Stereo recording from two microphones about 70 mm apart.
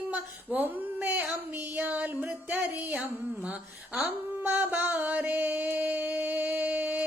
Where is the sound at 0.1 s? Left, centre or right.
Right.